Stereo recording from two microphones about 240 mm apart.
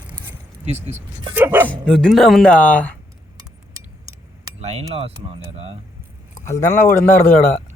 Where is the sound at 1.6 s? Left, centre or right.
Centre.